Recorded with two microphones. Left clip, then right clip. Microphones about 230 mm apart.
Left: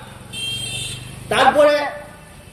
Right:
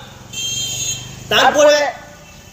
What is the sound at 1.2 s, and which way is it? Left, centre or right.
Speech, centre.